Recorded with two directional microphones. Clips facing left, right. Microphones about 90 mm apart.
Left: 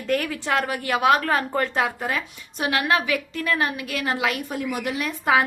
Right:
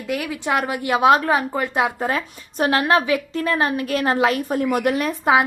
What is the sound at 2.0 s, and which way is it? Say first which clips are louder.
A woman's voice: right 4 dB; 30° right (ahead or behind).